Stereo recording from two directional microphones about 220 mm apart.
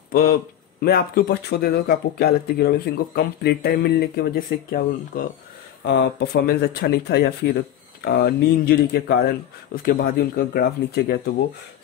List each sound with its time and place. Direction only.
0.1 s speech: 40° left (ahead or behind)